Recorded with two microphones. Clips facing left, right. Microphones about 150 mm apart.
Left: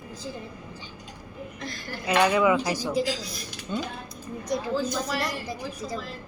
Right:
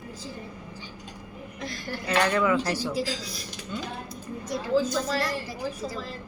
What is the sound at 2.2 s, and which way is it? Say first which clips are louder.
Speech: left 3 dB; 10° left (ahead or behind).